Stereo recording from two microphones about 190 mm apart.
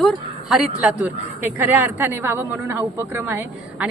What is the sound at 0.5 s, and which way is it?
A woman's voice, 5° right (ahead or behind).